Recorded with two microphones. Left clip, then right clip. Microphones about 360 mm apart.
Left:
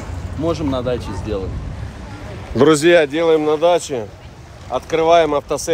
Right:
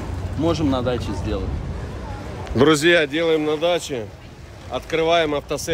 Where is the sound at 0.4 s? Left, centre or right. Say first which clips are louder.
Left 1 dB; centre.